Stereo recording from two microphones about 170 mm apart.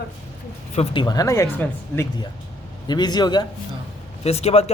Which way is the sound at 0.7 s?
25° left (ahead or behind).